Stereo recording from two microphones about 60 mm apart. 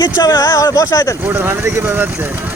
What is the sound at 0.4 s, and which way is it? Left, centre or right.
Speech, left.